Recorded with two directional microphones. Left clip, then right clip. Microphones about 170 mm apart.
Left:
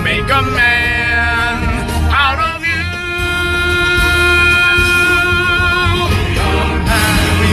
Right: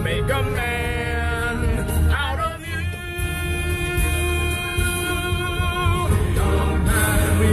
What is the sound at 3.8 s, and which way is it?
Music, 5° left (ahead or behind).